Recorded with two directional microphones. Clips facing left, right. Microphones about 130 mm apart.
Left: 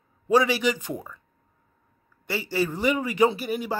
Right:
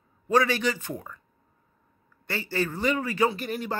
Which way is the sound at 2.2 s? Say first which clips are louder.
Left 3 dB; 10° left (ahead or behind).